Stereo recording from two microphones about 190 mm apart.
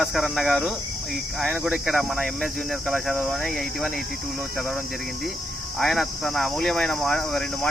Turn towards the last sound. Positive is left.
turn(degrees=5)  # may be behind; listen again after turning